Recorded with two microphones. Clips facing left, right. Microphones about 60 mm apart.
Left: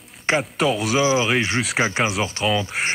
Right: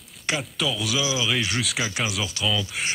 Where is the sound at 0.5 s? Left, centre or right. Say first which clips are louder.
Left 6 dB; left.